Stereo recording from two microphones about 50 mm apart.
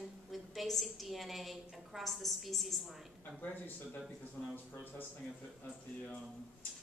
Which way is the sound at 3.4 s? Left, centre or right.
Left.